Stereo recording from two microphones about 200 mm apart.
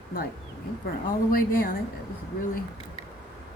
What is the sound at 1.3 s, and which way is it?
Speech, 45° left (ahead or behind).